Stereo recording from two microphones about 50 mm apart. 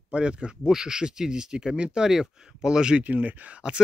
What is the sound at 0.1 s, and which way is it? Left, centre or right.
Speech, right.